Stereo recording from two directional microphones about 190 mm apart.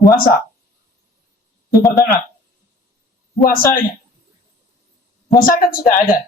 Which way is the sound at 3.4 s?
50° left (ahead or behind).